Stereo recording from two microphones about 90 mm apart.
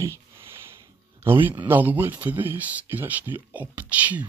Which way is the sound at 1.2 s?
25° right (ahead or behind).